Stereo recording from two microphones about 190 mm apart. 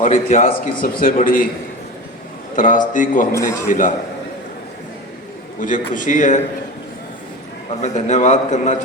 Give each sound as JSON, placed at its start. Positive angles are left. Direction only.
{"t": 0.0, "sound": "a man's voice", "side_deg": 40}
{"t": 2.6, "sound": "a man's voice", "side_deg": 45}
{"t": 5.5, "sound": "a man's voice", "side_deg": 45}
{"t": 7.8, "sound": "a man's voice", "side_deg": 40}